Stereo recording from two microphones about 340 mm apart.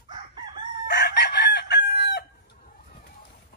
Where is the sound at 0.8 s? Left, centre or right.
Left.